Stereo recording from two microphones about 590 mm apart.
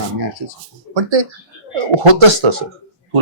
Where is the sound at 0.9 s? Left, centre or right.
Right.